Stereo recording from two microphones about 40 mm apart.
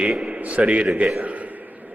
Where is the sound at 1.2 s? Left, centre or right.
Right.